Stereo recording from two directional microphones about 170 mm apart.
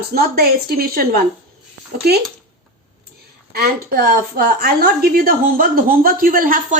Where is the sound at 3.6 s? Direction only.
60° right (ahead or behind).